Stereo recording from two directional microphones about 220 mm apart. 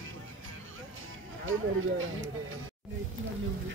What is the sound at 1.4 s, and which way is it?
Speech, 65° right (ahead or behind).